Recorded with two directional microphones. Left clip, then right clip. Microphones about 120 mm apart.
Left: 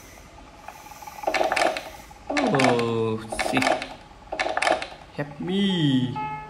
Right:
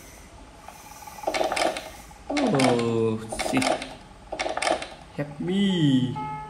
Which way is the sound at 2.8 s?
25° left (ahead or behind).